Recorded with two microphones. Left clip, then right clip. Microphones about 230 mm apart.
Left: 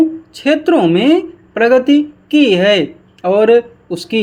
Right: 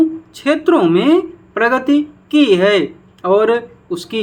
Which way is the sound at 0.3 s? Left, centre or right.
Left.